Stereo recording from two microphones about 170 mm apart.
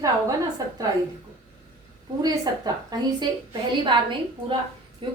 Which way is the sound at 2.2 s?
20° right (ahead or behind).